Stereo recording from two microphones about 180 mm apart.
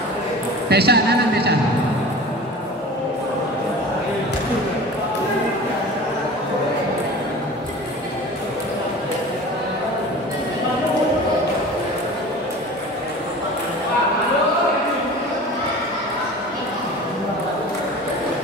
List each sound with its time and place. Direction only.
0.7 s a woman's voice: 65° right (ahead or behind)